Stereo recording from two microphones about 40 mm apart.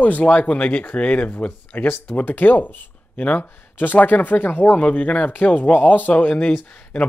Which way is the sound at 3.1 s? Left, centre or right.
Left.